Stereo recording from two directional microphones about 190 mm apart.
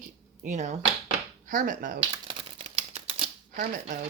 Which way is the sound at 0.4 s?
40° right (ahead or behind).